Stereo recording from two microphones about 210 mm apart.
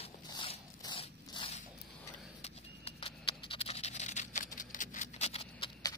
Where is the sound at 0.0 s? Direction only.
25° left (ahead or behind).